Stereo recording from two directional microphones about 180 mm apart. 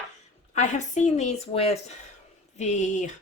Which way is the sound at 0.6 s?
40° left (ahead or behind).